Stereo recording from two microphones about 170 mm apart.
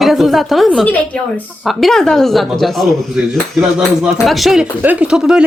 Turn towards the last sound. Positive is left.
turn(degrees=-5)  # may be behind; listen again after turning